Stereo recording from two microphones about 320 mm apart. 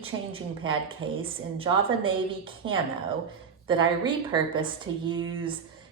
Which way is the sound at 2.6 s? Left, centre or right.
Right.